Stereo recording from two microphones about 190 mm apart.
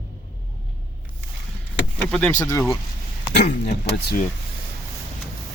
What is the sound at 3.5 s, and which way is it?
Speech, 35° left (ahead or behind).